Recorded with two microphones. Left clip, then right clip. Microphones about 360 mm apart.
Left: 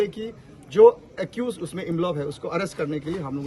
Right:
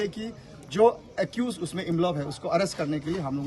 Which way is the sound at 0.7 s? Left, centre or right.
Centre.